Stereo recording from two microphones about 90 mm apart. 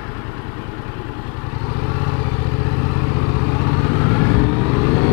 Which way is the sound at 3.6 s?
25° left (ahead or behind).